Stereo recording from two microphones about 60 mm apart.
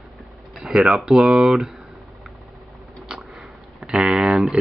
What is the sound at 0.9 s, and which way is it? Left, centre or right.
Speech, centre.